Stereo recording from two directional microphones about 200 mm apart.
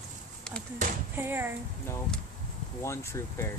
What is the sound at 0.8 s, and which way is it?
Speech, 35° right (ahead or behind).